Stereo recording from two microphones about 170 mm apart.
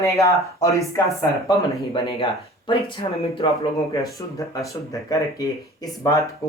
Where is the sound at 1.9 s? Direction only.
30° left (ahead or behind).